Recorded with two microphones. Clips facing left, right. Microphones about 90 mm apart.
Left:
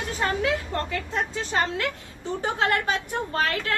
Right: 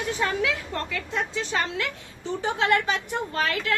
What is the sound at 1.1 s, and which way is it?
A woman's voice, 40° left (ahead or behind).